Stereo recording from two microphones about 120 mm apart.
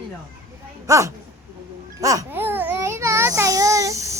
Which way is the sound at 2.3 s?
15° right (ahead or behind).